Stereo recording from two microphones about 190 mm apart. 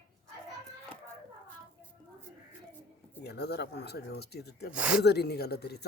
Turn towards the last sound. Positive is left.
turn(degrees=60)  # may be behind; listen again after turning